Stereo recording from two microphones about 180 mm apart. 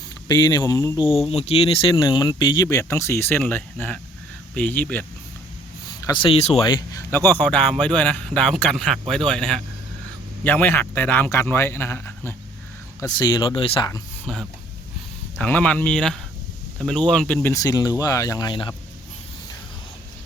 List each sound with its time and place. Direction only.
0.3 s speech: 20° left (ahead or behind)
1.0 s speech: centre (ahead or behind)
1.3 s speech: 35° left (ahead or behind); by 5.0 s 10° left (ahead or behind)
6.1 s speech: 30° left (ahead or behind)
6.7 s speech: 25° left (ahead or behind)
7.1 s speech: 10° left (ahead or behind)
13.0 s speech: 20° left (ahead or behind)
14.3 s speech: 5° left (ahead or behind); by 18.7 s 25° left (ahead or behind)